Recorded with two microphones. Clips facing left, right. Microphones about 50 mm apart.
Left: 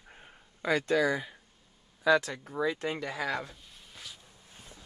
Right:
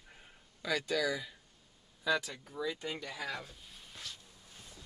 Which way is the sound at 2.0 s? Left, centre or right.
Left.